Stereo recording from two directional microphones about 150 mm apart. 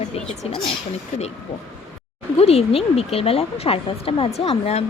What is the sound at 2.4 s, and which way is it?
A woman's voice, 40° left (ahead or behind).